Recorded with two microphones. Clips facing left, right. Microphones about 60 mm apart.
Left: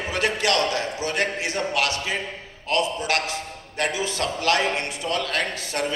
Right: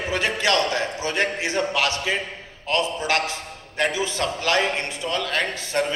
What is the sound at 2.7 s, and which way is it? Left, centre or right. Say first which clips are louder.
A man's voice: right 1 dB; right.